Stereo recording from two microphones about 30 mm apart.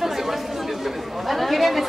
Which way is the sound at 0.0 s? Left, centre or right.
Centre.